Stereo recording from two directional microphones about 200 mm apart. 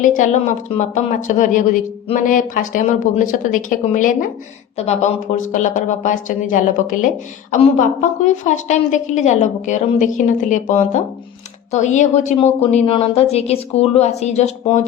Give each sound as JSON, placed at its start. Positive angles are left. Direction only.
{"t": 0.0, "sound": "speech", "side_deg": 40}